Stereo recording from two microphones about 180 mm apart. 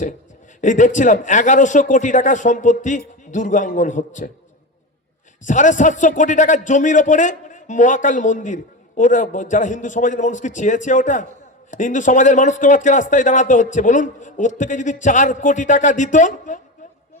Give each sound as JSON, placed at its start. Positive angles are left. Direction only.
{"t": 0.6, "sound": "a man's voice", "side_deg": 45}
{"t": 5.5, "sound": "a man's voice", "side_deg": 45}